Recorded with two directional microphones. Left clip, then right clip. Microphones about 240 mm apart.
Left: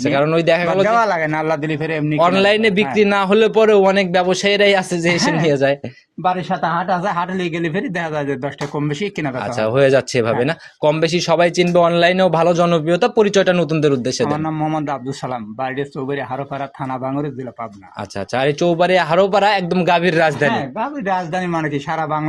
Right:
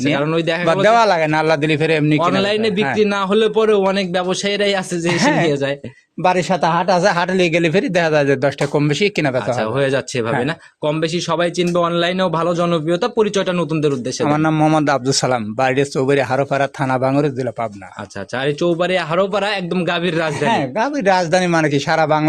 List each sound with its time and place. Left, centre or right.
0.0 s speech: centre
0.9 s speech: right
2.2 s speech: centre
6.2 s a man's voice: right
9.6 s speech: centre
14.3 s a man's voice: right
18.3 s speech: centre
20.5 s a man's voice: right